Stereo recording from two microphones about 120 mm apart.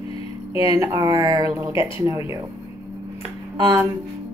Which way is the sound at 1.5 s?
20° right (ahead or behind).